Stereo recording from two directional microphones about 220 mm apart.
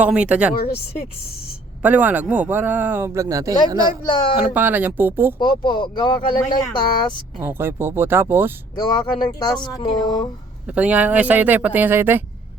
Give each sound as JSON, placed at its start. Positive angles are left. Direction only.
{"t": 0.0, "sound": "speech", "side_deg": -5}
{"t": 0.5, "sound": "speech", "side_deg": 45}
{"t": 1.8, "sound": "speech", "side_deg": -5}
{"t": 4.0, "sound": "speech", "side_deg": 20}
{"t": 4.4, "sound": "speech", "side_deg": -5}
{"t": 5.4, "sound": "speech", "side_deg": 20}
{"t": 7.3, "sound": "speech", "side_deg": -10}
{"t": 8.7, "sound": "speech", "side_deg": 20}
{"t": 10.7, "sound": "speech", "side_deg": -5}